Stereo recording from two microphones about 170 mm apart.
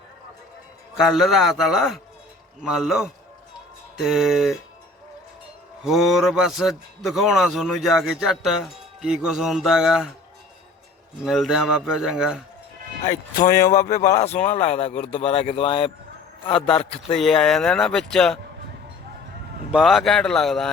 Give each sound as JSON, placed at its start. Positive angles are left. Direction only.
{"t": 0.9, "sound": "a man's voice", "side_deg": -5}
{"t": 5.8, "sound": "a man's voice", "side_deg": 0}
{"t": 11.2, "sound": "a man's voice", "side_deg": 0}
{"t": 13.7, "sound": "speech", "side_deg": 20}
{"t": 14.2, "sound": "speech", "side_deg": 40}
{"t": 17.2, "sound": "a man's voice", "side_deg": 0}
{"t": 19.7, "sound": "a man's voice", "side_deg": 0}